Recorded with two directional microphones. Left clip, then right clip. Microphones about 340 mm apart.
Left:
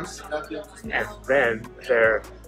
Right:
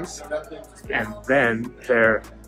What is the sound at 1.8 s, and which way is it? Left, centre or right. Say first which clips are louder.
Speech: right 1 dB; right.